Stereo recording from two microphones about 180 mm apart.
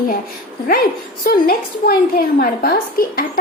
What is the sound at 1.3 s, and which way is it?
A woman's voice, 55° left (ahead or behind).